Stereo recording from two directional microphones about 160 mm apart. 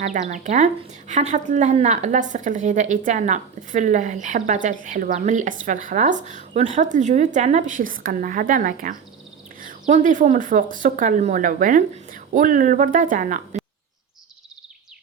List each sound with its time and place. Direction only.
0.0 s a woman's voice: 50° right (ahead or behind)